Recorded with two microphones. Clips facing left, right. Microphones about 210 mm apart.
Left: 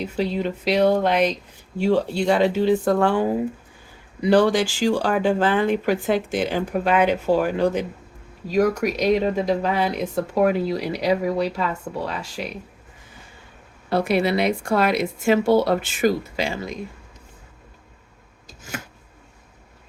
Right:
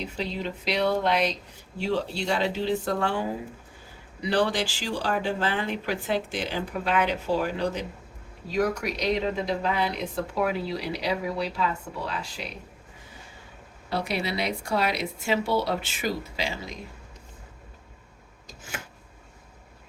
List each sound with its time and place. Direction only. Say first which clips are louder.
0.2 s speech: left 9 dB; 45° left (ahead or behind)
13.9 s speech: left 9 dB; 50° left (ahead or behind)